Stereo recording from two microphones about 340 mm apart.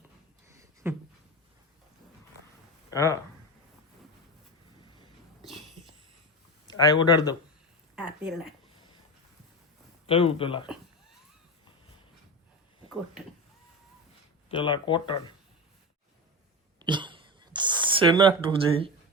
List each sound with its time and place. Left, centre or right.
0.5 s a sound: centre
2.9 s speech: centre
5.4 s wheeze: centre
6.7 s speech: centre
7.9 s a woman's voice: centre
10.1 s speech: centre
14.5 s speech: centre
16.8 s a sound: centre